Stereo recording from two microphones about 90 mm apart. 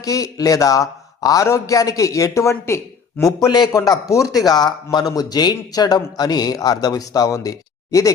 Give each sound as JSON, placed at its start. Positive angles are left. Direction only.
{"t": 0.0, "sound": "a man's voice", "side_deg": 40}
{"t": 3.4, "sound": "speech", "side_deg": 50}
{"t": 3.7, "sound": "speech", "side_deg": 40}